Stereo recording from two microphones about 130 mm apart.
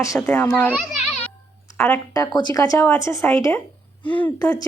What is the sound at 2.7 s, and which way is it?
Speech, 15° left (ahead or behind).